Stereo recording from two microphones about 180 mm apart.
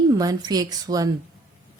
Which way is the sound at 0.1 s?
20° right (ahead or behind).